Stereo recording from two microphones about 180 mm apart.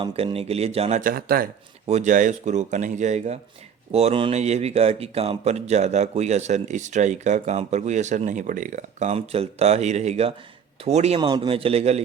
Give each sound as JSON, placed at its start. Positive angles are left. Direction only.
{"t": 0.0, "sound": "speech", "side_deg": -30}
{"t": 1.1, "sound": "speech", "side_deg": -55}
{"t": 1.9, "sound": "speech", "side_deg": -40}